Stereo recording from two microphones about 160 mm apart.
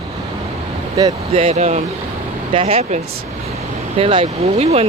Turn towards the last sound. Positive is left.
turn(degrees=-40)  # may be behind; listen again after turning